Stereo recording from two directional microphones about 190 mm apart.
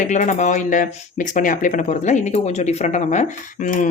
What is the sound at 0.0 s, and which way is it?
Speech, 40° left (ahead or behind).